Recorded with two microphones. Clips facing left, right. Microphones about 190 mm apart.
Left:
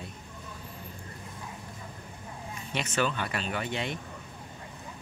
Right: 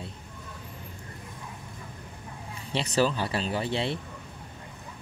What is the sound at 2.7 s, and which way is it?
Speech, 35° right (ahead or behind).